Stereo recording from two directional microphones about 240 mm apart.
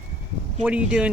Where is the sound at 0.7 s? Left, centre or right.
Centre.